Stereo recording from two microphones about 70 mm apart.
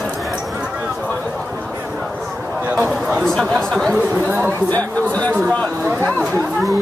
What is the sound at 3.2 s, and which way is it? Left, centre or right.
Speech, centre.